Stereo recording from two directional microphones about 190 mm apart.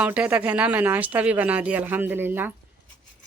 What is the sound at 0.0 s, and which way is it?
Speech, 5° right (ahead or behind).